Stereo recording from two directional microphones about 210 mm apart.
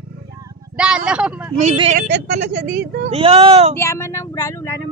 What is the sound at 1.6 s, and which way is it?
Speech, 30° right (ahead or behind).